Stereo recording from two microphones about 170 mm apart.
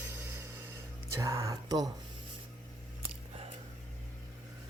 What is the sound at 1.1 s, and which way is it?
Speech, 15° right (ahead or behind).